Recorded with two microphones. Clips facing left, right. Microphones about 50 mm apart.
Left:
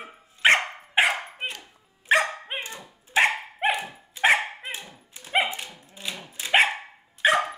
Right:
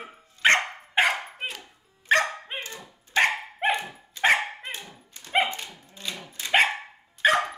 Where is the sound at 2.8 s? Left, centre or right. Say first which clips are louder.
Left 1 dB; centre.